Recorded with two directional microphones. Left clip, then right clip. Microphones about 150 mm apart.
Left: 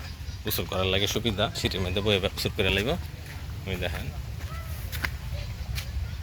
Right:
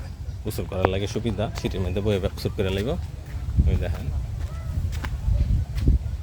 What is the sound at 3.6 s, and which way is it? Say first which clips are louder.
Speech: left 1 dB; 10° right (ahead or behind).